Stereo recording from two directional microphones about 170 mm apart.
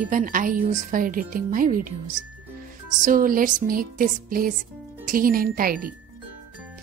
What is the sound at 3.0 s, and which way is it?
Speech, 55° right (ahead or behind).